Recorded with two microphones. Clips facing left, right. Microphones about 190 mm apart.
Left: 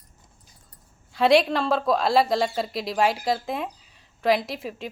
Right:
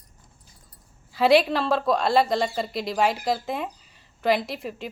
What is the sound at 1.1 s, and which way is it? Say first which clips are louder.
A woman's voice: even; centre (ahead or behind).